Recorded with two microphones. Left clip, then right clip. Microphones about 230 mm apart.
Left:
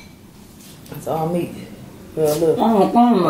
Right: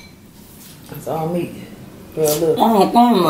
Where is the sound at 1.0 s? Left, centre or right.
Centre.